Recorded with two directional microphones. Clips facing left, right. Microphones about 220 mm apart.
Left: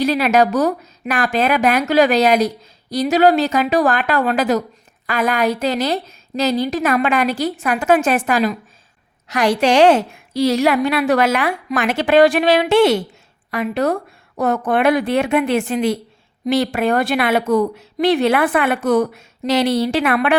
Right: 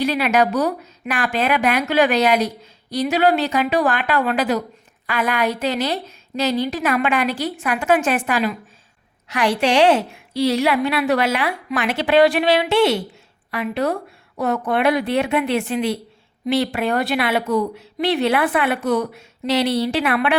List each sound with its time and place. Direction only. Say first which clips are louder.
0.0 s a woman's voice: left 3 dB; 40° left (ahead or behind)